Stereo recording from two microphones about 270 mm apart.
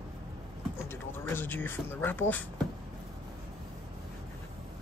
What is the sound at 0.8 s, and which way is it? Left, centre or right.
Speech, centre.